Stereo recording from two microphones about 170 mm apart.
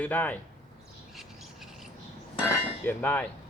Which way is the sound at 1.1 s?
Centre (ahead or behind).